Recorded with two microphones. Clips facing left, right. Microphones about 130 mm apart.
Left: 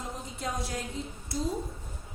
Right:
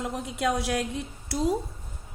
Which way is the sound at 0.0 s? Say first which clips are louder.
Right 8 dB; 75° right (ahead or behind).